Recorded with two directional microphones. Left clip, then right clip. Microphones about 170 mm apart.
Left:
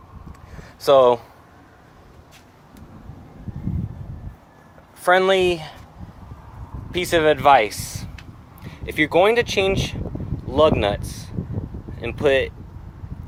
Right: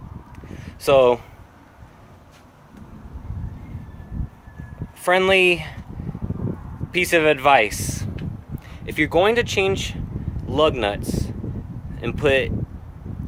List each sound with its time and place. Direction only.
0.9 s speech: 15° right (ahead or behind)
5.0 s speech: 15° right (ahead or behind)
6.9 s speech: 15° right (ahead or behind)